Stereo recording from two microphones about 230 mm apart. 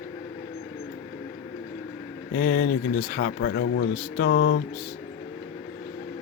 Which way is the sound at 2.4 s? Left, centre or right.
Left.